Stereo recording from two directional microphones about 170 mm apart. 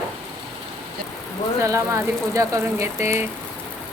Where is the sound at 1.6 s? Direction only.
15° right (ahead or behind).